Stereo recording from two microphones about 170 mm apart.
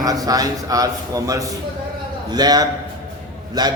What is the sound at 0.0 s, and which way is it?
A man's voice, 20° right (ahead or behind).